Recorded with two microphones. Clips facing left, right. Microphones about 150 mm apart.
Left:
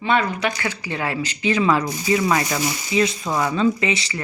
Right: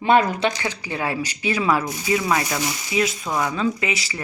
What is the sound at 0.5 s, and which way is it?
Speech, 15° right (ahead or behind).